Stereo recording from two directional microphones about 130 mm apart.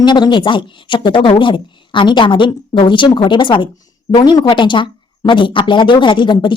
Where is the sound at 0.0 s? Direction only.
35° left (ahead or behind).